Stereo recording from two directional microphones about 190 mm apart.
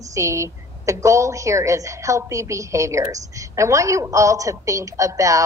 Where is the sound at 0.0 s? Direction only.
15° right (ahead or behind).